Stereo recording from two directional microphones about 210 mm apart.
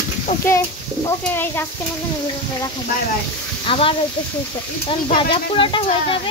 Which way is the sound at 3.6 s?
25° left (ahead or behind).